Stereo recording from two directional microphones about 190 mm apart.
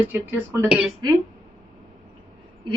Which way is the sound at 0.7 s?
5° right (ahead or behind).